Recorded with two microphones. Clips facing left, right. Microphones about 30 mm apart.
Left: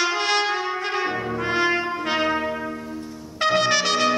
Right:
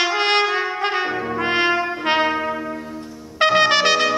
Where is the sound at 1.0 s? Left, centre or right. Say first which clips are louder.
Right 2 dB; centre.